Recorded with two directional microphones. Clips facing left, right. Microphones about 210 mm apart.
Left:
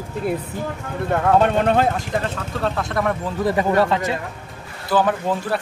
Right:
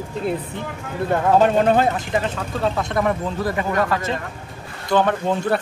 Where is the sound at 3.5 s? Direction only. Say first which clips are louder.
Left 5 dB; 30° left (ahead or behind).